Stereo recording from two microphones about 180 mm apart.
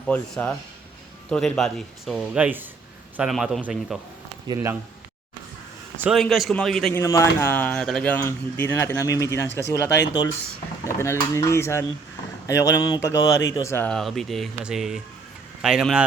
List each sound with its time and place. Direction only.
0.1 s speech: 10° left (ahead or behind)
4.4 s speech: 15° right (ahead or behind)
6.0 s speech: centre (ahead or behind)
7.0 s speech: 15° left (ahead or behind); by 16.0 s 5° right (ahead or behind)